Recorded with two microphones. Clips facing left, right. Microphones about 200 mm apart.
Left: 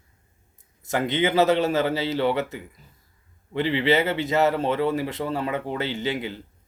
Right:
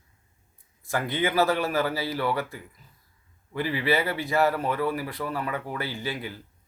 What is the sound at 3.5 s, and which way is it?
Speech, 25° left (ahead or behind).